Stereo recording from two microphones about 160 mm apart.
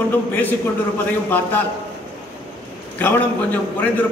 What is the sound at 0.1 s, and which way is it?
A man's voice, 10° left (ahead or behind).